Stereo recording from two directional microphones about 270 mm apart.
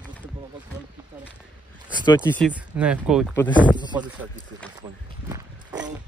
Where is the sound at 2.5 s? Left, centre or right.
Centre.